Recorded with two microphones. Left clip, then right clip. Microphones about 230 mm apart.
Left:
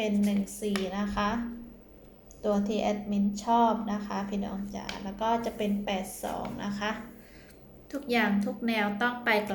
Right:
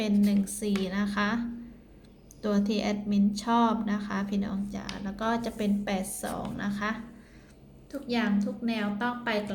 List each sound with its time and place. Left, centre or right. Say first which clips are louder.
0.3 s a woman's voice: right 2 dB; right
2.4 s a woman's voice: left 1 dB; right
7.9 s a woman's voice: left 3 dB; centre